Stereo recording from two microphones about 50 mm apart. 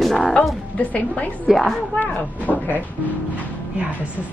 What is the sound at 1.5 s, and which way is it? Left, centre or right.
Speech, centre.